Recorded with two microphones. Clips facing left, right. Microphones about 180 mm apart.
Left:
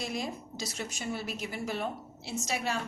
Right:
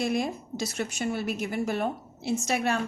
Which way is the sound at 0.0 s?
55° right (ahead or behind).